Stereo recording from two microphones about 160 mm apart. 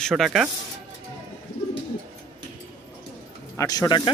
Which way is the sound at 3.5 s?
20° left (ahead or behind).